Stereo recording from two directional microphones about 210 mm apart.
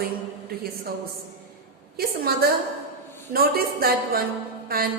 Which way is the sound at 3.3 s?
45° right (ahead or behind).